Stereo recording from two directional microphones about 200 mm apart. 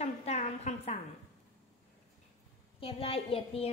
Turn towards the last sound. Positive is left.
turn(degrees=30)  # may be behind; listen again after turning